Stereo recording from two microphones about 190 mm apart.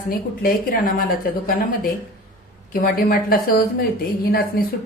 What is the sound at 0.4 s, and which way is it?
A woman's voice, 50° left (ahead or behind).